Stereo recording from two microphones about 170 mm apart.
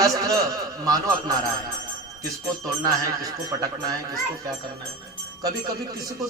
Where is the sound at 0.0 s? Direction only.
20° right (ahead or behind).